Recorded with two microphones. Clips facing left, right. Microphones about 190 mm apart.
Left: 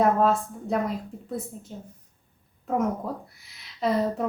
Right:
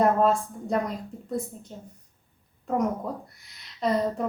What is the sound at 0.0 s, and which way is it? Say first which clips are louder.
A woman's voice: even; centre (ahead or behind).